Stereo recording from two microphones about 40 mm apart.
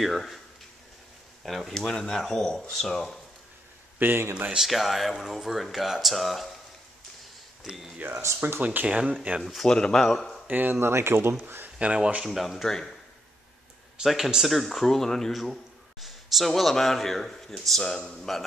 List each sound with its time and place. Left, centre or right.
0.0 s speech: centre
1.4 s speech: centre
1.8 s speech: centre
4.0 s speech: right
4.6 s speech: centre
8.0 s speech: right
8.8 s speech: right
9.7 s speech: left
10.4 s speech: right
10.7 s speech: right
11.4 s a sound: right
11.8 s speech: right
12.3 s speech: centre
14.0 s a man's voice: centre